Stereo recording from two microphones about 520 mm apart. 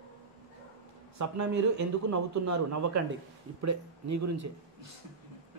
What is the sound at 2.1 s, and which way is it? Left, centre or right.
Speech, right.